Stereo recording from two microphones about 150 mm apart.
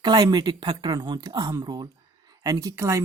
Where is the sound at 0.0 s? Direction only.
30° right (ahead or behind).